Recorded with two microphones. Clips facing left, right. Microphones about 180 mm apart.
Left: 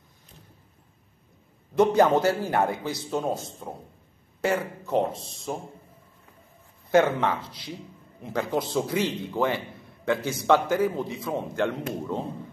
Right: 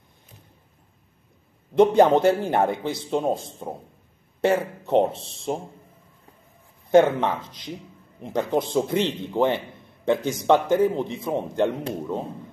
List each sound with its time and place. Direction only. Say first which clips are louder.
1.8 s a man's voice: right 4 dB; 25° right (ahead or behind)
7.0 s a man's voice: right 4 dB; 15° right (ahead or behind)